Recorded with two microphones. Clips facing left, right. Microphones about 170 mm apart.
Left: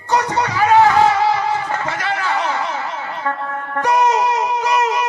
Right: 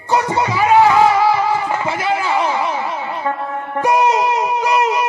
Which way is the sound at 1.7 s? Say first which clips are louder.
Right 3 dB; 15° right (ahead or behind).